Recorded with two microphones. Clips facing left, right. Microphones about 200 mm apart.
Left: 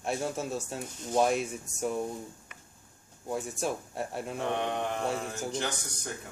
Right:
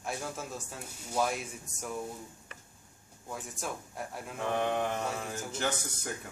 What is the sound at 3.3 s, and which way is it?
Speech, 25° left (ahead or behind).